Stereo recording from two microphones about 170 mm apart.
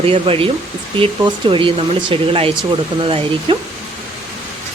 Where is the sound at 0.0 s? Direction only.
35° right (ahead or behind).